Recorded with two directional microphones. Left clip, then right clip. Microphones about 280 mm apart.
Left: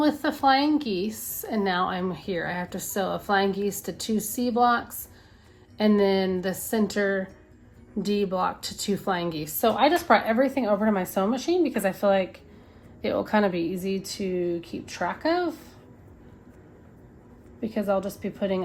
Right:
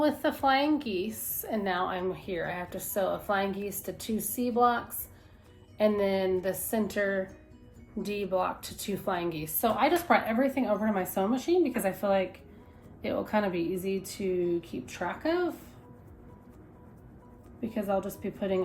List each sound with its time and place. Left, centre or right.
0.0 s a woman's voice: left
17.6 s a woman's voice: left